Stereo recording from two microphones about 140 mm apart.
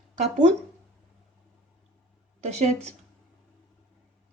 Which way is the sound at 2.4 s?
50° right (ahead or behind).